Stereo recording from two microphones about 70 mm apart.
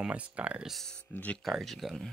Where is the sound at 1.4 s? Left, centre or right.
Centre.